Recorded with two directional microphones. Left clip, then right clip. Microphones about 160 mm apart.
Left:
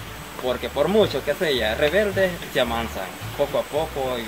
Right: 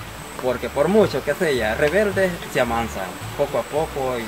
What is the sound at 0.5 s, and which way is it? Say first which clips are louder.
Speech: right 2 dB; 5° right (ahead or behind).